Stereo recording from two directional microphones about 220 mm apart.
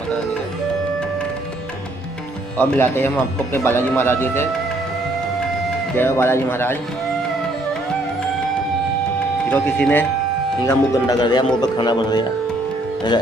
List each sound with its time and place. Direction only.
2.5 s a man's voice: 5° left (ahead or behind)
5.9 s a man's voice: 10° left (ahead or behind)
9.5 s a man's voice: 5° left (ahead or behind)